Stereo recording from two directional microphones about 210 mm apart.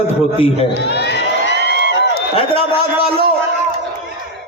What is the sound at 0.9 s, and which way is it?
Crowd, 55° left (ahead or behind).